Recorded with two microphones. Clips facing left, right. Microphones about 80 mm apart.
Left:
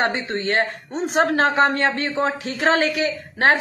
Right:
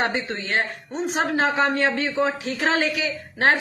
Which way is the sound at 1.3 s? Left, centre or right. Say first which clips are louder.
Left 3 dB; left.